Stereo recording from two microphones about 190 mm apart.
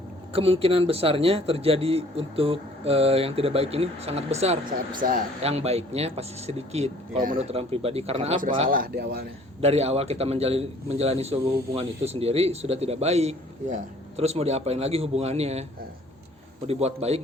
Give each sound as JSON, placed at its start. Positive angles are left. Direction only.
{"t": 0.3, "sound": "a man's voice", "side_deg": -30}
{"t": 4.9, "sound": "speech", "side_deg": -45}
{"t": 5.4, "sound": "a man's voice", "side_deg": -35}
{"t": 8.7, "sound": "speech", "side_deg": -50}
{"t": 9.6, "sound": "a man's voice", "side_deg": -35}
{"t": 16.6, "sound": "a man's voice", "side_deg": -35}